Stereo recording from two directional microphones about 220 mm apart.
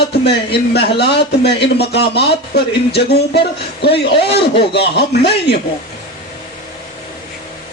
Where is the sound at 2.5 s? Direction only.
45° left (ahead or behind).